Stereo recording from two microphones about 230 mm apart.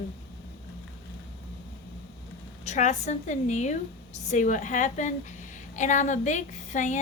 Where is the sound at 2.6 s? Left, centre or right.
Left.